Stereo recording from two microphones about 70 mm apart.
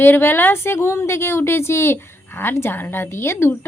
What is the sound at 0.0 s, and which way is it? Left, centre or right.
A woman's voice, left.